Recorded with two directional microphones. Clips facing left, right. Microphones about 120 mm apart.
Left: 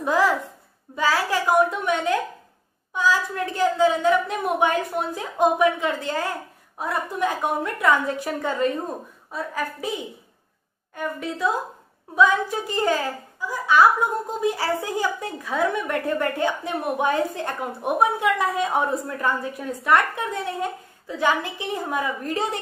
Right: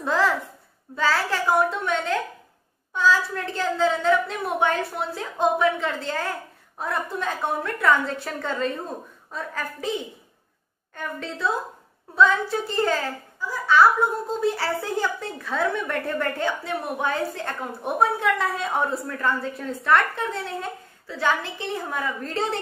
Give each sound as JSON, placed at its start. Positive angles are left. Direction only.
{"t": 0.0, "sound": "a woman's voice", "side_deg": 15}
{"t": 11.0, "sound": "a woman's voice", "side_deg": 10}